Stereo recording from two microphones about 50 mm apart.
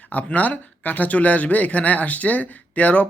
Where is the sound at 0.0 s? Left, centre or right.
Left.